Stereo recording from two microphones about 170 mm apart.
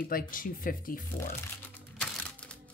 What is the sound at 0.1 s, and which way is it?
Speech, 55° left (ahead or behind).